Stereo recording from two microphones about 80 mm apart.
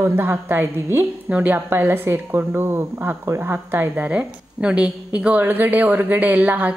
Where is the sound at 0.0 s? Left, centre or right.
Right.